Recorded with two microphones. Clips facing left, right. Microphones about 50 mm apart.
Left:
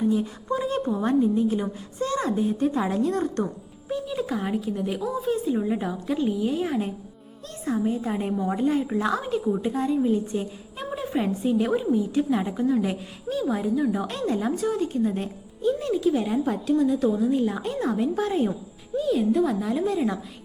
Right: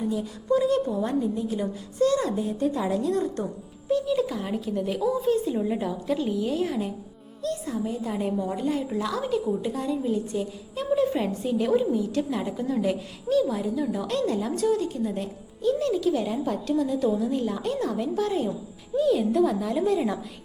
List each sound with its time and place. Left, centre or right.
0.1 s a woman's voice: left
3.8 s a woman's voice: centre
6.7 s a woman's voice: left
11.0 s a woman's voice: centre
14.9 s a woman's voice: left
15.6 s a woman's voice: centre
18.9 s speech: centre